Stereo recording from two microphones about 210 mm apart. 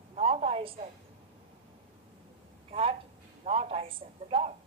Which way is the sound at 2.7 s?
25° right (ahead or behind).